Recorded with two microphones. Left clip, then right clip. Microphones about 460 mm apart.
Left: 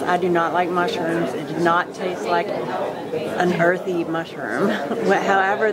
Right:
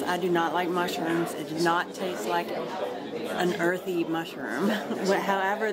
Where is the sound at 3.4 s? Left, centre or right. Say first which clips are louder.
Left 8 dB; left.